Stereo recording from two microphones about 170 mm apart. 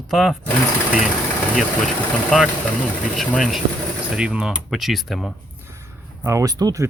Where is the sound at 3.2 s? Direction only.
Centre (ahead or behind).